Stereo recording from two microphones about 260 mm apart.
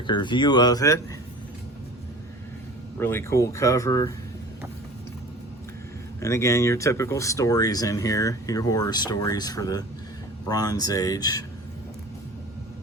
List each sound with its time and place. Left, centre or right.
0.1 s speech: centre
3.0 s speech: centre
6.1 s speech: centre